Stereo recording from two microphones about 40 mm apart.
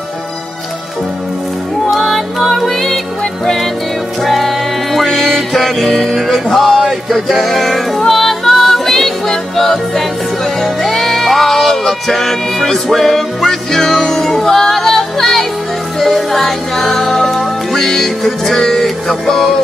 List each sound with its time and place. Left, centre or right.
1.9 s music: centre
4.2 s music: centre